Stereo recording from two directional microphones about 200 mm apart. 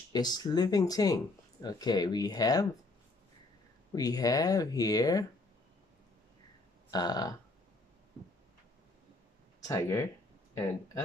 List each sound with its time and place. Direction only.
0.1 s speech: 20° left (ahead or behind)
3.9 s speech: 20° left (ahead or behind)
6.9 s speech: 20° left (ahead or behind)
9.6 s speech: 15° left (ahead or behind)